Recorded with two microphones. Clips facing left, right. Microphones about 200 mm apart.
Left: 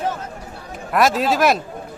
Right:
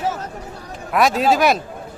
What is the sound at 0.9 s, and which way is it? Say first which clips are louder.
Speech: right 1 dB; centre (ahead or behind).